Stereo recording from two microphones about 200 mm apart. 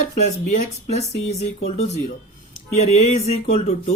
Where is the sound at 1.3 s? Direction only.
35° left (ahead or behind).